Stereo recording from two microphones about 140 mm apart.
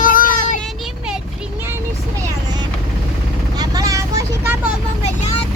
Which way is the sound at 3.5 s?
25° right (ahead or behind).